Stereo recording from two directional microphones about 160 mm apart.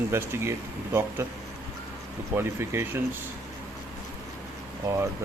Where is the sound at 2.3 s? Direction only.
15° right (ahead or behind).